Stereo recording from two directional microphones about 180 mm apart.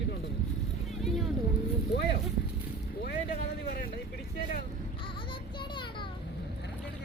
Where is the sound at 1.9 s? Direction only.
70° left (ahead or behind).